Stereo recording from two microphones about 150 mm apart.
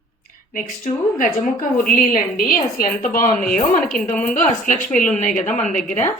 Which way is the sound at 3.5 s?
60° left (ahead or behind).